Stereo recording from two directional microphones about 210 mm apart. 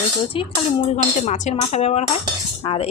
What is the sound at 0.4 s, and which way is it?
Speech, 25° left (ahead or behind).